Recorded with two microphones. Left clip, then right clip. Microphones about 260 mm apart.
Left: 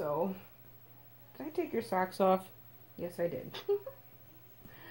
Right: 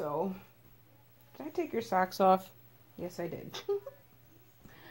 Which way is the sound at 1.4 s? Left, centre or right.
Right.